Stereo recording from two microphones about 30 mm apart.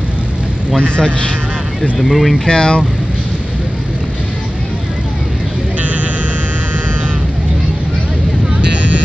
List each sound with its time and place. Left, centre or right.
0.8 s a man's voice: left
1.8 s speech: centre
2.4 s speech: left